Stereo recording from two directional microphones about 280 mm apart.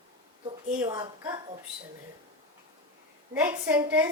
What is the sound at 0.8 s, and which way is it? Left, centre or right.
Speech, centre.